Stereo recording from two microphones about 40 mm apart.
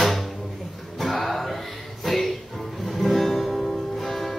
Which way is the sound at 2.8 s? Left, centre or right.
Centre.